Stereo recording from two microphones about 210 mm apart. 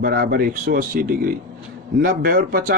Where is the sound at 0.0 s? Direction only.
45° right (ahead or behind).